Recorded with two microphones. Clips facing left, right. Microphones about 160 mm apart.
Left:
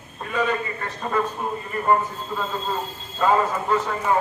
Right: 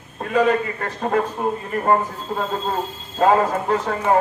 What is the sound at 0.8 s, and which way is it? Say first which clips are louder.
A man's voice: right 4 dB; 55° right (ahead or behind).